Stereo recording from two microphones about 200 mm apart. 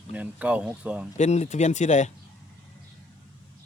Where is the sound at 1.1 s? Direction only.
35° left (ahead or behind).